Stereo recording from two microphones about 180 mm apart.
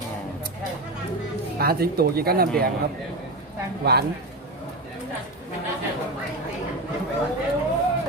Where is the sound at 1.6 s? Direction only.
60° right (ahead or behind).